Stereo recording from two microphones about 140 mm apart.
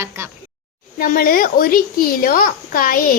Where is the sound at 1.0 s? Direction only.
90° left.